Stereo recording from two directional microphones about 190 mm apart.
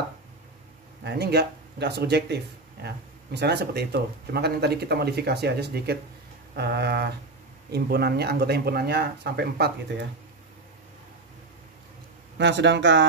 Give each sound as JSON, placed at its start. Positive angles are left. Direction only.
{"t": 1.0, "sound": "speech", "side_deg": -60}
{"t": 12.4, "sound": "speech", "side_deg": -70}